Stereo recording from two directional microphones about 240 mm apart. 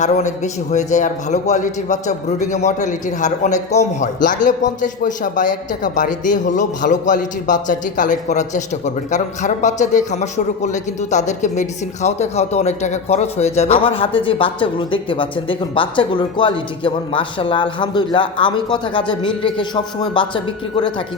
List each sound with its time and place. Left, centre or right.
0.0 s a man's voice: left